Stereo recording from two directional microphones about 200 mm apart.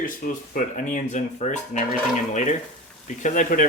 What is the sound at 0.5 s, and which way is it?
Speech, 40° left (ahead or behind).